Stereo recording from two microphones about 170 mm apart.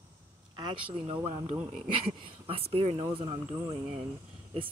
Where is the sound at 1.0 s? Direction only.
30° right (ahead or behind).